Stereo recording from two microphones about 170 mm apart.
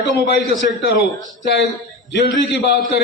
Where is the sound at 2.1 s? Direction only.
85° left.